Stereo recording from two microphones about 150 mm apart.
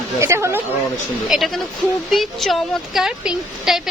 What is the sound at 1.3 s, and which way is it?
A woman's voice, centre (ahead or behind).